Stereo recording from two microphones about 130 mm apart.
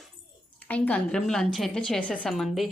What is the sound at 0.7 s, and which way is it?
A woman's voice, 10° left (ahead or behind).